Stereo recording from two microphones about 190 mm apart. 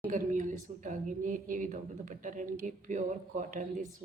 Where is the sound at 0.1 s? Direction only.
45° right (ahead or behind).